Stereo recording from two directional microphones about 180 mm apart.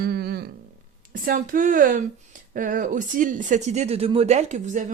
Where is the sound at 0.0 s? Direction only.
60° right (ahead or behind).